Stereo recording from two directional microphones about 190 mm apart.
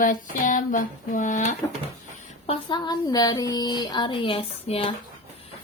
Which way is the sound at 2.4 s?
25° left (ahead or behind).